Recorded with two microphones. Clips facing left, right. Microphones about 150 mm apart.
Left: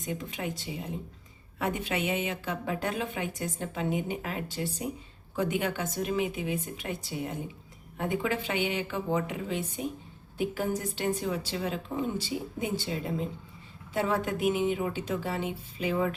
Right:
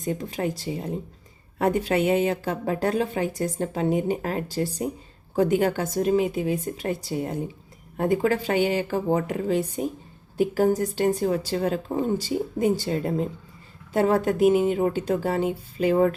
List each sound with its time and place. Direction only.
0.0 s a woman's voice: 35° right (ahead or behind)